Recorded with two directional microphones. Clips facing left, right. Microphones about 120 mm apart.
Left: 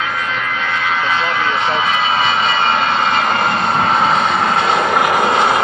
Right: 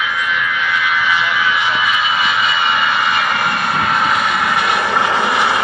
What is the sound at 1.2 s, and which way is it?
Vehicle, 25° left (ahead or behind).